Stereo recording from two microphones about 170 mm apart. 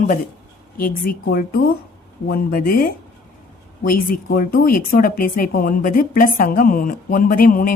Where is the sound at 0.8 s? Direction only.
60° left (ahead or behind).